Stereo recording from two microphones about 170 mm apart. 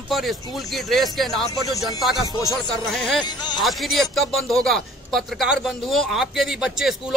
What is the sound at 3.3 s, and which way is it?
Speech, 25° left (ahead or behind).